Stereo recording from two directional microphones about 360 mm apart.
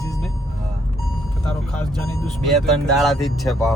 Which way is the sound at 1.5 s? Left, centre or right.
Centre.